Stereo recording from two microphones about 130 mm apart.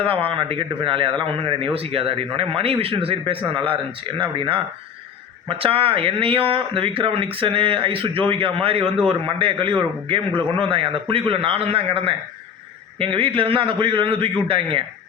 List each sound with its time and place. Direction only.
0.0 s a man's voice: 45° right (ahead or behind)